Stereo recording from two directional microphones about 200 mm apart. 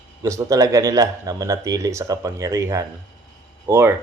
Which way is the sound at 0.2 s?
15° right (ahead or behind).